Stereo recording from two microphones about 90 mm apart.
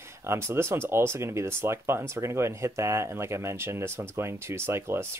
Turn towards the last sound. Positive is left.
turn(degrees=-30)  # may be behind; listen again after turning